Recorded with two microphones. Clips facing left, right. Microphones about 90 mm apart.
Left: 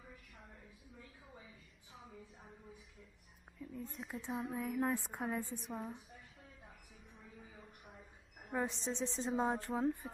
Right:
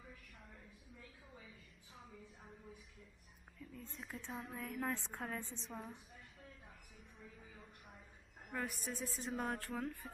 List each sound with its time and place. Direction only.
3.5 s a woman's voice: 10° left (ahead or behind)
7.2 s a sound: 10° left (ahead or behind)
8.5 s speech: 25° left (ahead or behind)
10.0 s a woman's voice: 5° left (ahead or behind)